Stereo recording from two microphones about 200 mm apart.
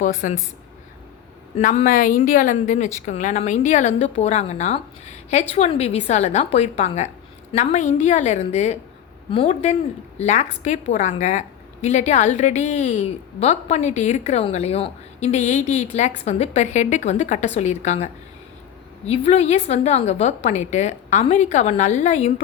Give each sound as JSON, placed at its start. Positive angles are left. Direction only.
{"t": 0.0, "sound": "a woman's voice", "side_deg": 35}
{"t": 1.5, "sound": "a woman's voice", "side_deg": 35}